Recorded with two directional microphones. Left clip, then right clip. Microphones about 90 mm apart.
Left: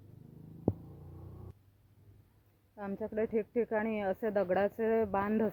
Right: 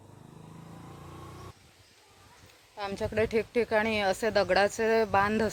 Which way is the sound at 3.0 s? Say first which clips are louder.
Right 6 dB; 30° right (ahead or behind).